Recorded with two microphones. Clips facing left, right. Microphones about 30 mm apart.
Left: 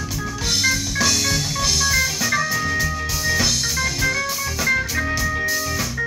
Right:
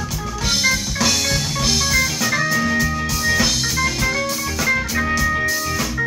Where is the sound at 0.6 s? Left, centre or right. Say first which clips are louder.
Right 1 dB; centre.